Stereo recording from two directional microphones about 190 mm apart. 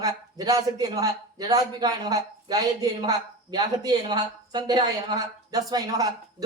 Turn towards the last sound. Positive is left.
turn(degrees=-20)  # may be behind; listen again after turning